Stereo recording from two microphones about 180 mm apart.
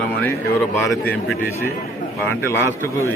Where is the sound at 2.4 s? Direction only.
15° left (ahead or behind).